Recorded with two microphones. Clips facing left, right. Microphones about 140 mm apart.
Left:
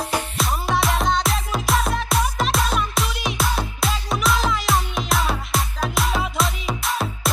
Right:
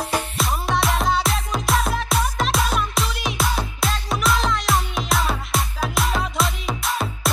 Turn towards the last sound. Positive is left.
turn(degrees=0)  # may be behind; listen again after turning